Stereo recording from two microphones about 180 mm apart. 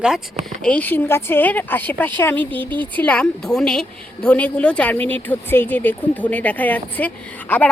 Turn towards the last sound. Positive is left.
turn(degrees=10)  # may be behind; listen again after turning